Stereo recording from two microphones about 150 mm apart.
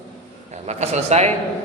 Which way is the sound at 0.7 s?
45° right (ahead or behind).